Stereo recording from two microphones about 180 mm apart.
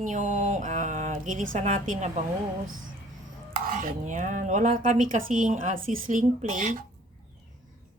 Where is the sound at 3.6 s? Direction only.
50° right (ahead or behind).